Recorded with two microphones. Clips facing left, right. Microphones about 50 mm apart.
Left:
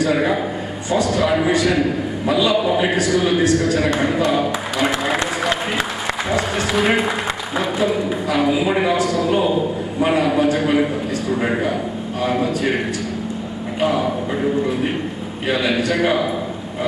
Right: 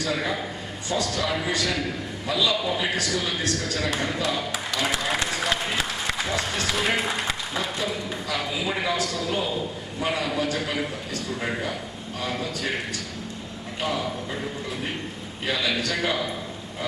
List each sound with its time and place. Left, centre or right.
0.0 s a man's voice: left
5.0 s applause: centre
6.2 s a man's voice: left
13.7 s a man's voice: left
15.4 s a man's voice: left